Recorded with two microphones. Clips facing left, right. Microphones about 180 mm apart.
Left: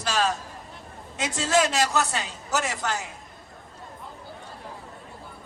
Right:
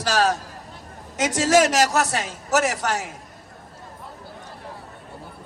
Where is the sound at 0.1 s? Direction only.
75° right (ahead or behind).